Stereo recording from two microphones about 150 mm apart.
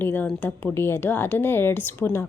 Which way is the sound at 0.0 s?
10° left (ahead or behind).